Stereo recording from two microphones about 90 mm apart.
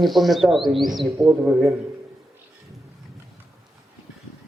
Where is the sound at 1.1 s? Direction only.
15° right (ahead or behind).